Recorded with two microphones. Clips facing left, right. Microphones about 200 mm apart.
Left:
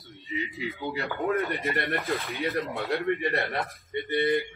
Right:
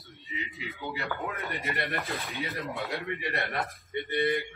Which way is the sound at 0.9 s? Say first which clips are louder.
Left 9 dB; 50° left (ahead or behind).